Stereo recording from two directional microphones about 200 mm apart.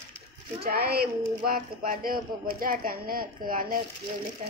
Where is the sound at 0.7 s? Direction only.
50° right (ahead or behind).